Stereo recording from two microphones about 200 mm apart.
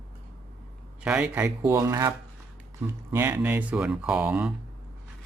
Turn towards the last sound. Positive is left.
turn(degrees=-5)  # may be behind; listen again after turning